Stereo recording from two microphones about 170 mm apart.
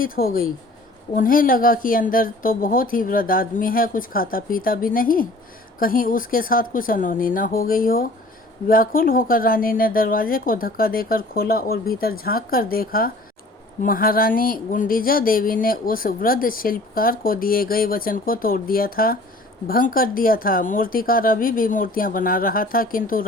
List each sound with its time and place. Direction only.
0.0 s speech: 60° left (ahead or behind)